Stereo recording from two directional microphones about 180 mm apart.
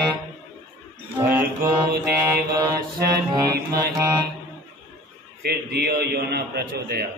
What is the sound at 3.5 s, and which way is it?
Speech, 60° right (ahead or behind).